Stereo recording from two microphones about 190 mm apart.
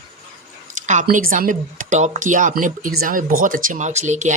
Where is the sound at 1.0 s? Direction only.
45° right (ahead or behind).